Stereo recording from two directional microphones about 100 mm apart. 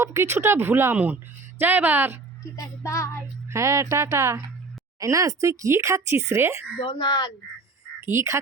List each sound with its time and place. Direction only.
0.0 s speech: 25° right (ahead or behind)
2.4 s child singing: 35° left (ahead or behind)
3.5 s speech: 30° right (ahead or behind)
6.7 s speech: 50° left (ahead or behind)
8.0 s speech: 25° right (ahead or behind)